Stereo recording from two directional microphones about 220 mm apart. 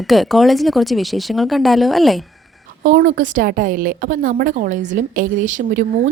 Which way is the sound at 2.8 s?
35° right (ahead or behind).